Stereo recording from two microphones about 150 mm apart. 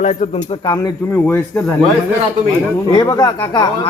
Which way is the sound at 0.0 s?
50° left (ahead or behind).